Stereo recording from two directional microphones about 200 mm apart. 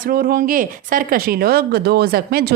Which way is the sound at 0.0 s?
45° right (ahead or behind).